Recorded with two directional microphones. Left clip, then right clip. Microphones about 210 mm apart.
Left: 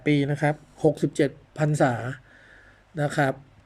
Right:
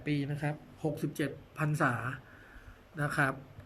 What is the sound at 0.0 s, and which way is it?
Speech, 35° left (ahead or behind).